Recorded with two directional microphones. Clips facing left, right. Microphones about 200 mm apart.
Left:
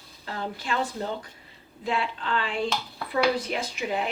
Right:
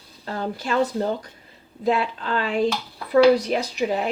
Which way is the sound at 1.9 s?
45° right (ahead or behind).